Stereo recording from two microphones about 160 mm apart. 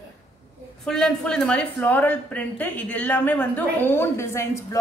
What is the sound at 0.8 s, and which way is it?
A woman's voice, 5° left (ahead or behind).